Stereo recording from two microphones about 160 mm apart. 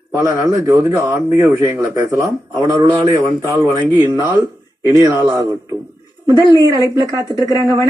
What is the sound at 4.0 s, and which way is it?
Speech, 20° right (ahead or behind).